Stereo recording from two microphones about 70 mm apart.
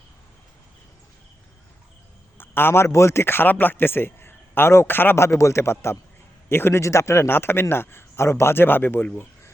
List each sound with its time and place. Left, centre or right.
2.4 s a man's voice: left